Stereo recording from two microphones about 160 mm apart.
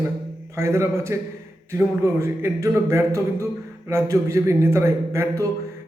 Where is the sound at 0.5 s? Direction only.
15° right (ahead or behind).